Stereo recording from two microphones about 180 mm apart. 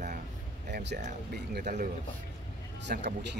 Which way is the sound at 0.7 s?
65° right (ahead or behind).